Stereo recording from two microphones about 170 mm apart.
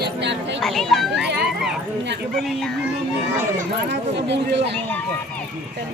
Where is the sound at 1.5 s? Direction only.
Centre (ahead or behind).